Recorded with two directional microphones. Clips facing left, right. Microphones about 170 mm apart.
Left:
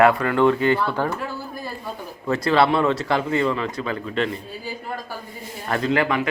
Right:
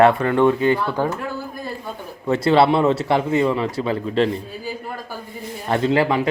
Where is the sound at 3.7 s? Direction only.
30° right (ahead or behind).